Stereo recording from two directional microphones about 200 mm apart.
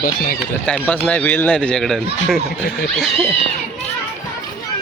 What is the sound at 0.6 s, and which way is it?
Speech, 5° left (ahead or behind).